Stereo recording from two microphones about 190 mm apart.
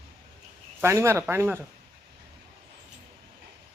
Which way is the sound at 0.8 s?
15° right (ahead or behind).